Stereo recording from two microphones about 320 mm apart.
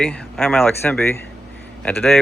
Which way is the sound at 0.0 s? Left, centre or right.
Centre.